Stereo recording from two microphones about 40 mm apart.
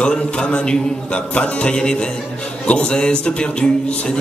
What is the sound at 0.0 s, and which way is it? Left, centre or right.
Speech, left.